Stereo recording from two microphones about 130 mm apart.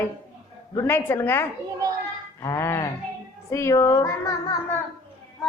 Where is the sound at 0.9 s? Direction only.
15° left (ahead or behind).